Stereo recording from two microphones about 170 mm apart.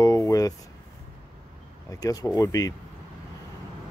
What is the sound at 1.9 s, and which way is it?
Speech, 20° left (ahead or behind).